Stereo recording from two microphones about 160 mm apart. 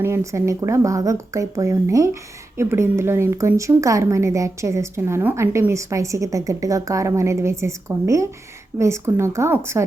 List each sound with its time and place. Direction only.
0.0 s speech: 15° right (ahead or behind)